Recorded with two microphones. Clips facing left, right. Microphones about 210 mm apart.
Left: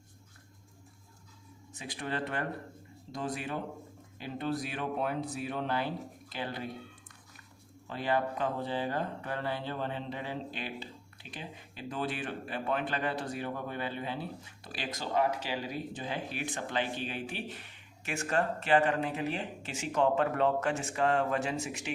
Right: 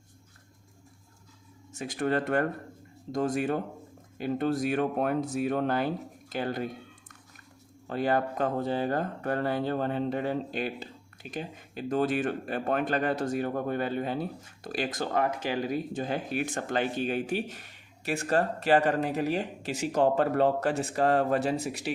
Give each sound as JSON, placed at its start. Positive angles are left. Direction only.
{"t": 1.7, "sound": "speech", "side_deg": -45}
{"t": 7.9, "sound": "speech", "side_deg": -45}